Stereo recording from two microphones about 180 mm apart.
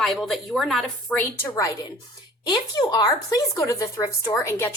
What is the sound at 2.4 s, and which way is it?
Speech, 20° left (ahead or behind).